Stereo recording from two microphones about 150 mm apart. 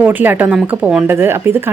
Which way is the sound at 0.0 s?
10° right (ahead or behind).